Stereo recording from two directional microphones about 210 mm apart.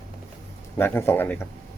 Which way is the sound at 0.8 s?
10° left (ahead or behind).